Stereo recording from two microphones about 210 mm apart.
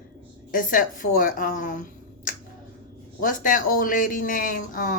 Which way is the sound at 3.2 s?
40° left (ahead or behind).